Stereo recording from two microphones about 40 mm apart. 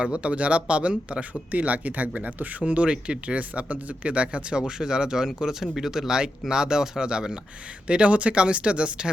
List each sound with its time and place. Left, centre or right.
0.0 s speech: right
1.3 s speech: right
2.8 s speech: right